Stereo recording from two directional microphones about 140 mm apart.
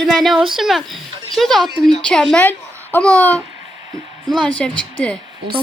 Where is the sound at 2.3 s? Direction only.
10° left (ahead or behind).